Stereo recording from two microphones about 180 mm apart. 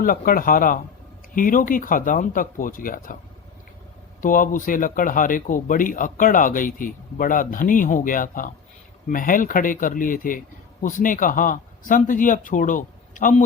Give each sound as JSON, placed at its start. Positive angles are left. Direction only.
{"t": 0.0, "sound": "speech", "side_deg": 50}
{"t": 4.2, "sound": "speech", "side_deg": 50}